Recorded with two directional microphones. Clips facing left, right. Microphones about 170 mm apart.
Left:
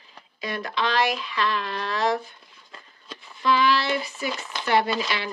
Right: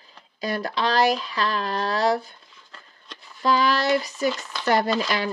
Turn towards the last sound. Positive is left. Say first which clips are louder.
# right 1 dB
turn(degrees=-40)  # may be behind; listen again after turning